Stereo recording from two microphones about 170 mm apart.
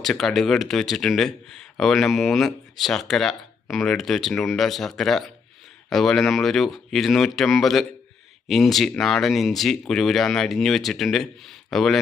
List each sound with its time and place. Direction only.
0.0 s speech: centre (ahead or behind)